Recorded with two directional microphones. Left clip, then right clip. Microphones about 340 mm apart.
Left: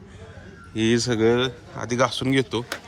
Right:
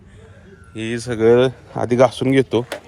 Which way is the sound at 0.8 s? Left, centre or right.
Centre.